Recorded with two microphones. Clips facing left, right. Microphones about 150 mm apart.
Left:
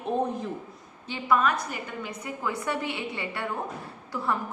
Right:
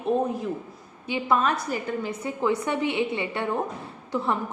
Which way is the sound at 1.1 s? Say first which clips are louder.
Right 1 dB; 25° right (ahead or behind).